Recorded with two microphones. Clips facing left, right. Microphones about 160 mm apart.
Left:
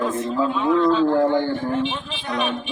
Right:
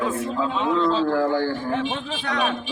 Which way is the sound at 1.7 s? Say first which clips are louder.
Left 1 dB; 70° right (ahead or behind).